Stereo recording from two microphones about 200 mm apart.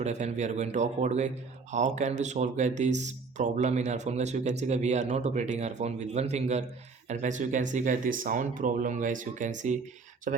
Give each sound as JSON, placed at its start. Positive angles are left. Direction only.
{"t": 0.0, "sound": "speech", "side_deg": -35}